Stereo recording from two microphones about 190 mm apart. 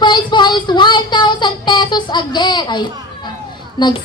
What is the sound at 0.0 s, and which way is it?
Child singing, 25° left (ahead or behind).